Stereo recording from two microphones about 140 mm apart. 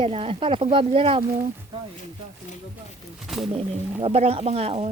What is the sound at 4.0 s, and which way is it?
Speech, 45° right (ahead or behind).